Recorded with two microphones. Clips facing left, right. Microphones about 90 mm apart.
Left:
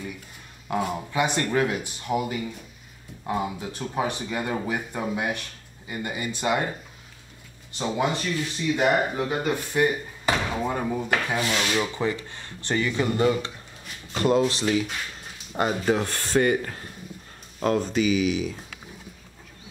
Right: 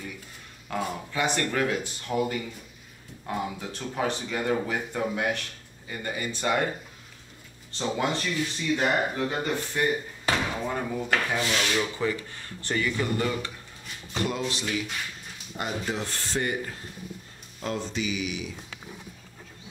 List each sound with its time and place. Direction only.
0.7 s speech: 15° left (ahead or behind)
7.7 s speech: 15° left (ahead or behind)
14.2 s speech: 35° left (ahead or behind)
15.5 s speech: 60° left (ahead or behind)
17.6 s speech: 55° left (ahead or behind)